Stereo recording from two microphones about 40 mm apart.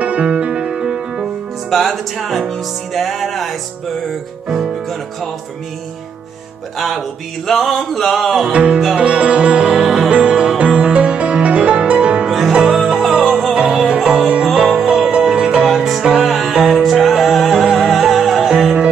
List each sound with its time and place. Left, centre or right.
0.0 s music: right
1.7 s music: centre
6.8 s music: centre
8.5 s music: right
9.8 s music: centre
12.3 s music: centre
14.2 s music: right
16.8 s music: centre
17.5 s music: centre
17.7 s music: centre